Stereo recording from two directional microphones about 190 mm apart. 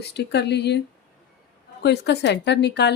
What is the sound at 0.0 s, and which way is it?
Speech, 60° left (ahead or behind).